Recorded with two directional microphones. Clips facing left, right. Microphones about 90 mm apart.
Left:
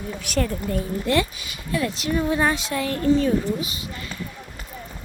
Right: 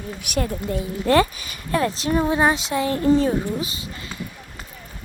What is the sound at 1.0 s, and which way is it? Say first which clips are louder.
Speech: right 7 dB; 40° right (ahead or behind).